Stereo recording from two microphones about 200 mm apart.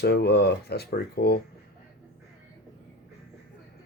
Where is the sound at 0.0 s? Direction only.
55° left (ahead or behind).